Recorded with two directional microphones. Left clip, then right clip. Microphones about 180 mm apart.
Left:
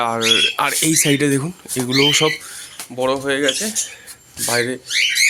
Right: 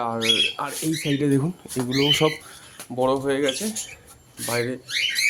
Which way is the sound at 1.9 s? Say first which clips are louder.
Left 5 dB; 15° left (ahead or behind).